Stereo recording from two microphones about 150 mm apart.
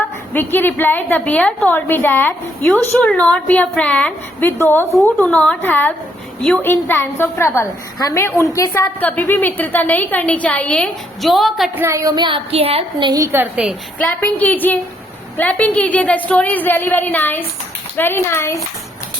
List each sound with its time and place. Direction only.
0.3 s a woman's voice: 15° left (ahead or behind)
11.7 s a woman's voice: 20° right (ahead or behind)
14.0 s a woman's voice: 10° left (ahead or behind)